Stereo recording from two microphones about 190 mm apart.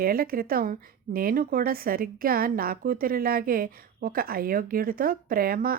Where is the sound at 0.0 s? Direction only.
50° right (ahead or behind).